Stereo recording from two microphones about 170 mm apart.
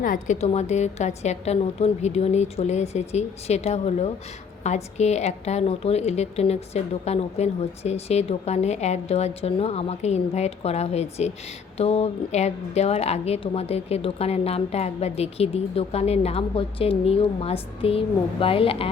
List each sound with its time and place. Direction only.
0.0 s a woman's voice: 50° left (ahead or behind); by 18.9 s 35° left (ahead or behind)